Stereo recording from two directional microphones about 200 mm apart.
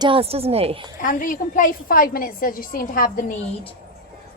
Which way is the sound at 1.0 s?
40° left (ahead or behind).